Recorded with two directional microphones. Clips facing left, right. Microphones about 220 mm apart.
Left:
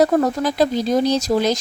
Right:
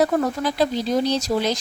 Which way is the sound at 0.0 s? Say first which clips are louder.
Left 4 dB; 40° left (ahead or behind).